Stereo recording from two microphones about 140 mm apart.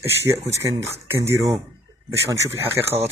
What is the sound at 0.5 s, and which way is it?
Speech, 20° right (ahead or behind).